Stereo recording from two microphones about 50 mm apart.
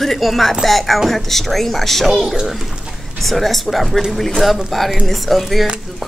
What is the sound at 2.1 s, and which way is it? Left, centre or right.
Speech, centre.